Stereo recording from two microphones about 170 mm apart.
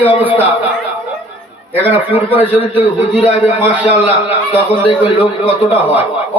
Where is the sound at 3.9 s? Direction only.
10° right (ahead or behind).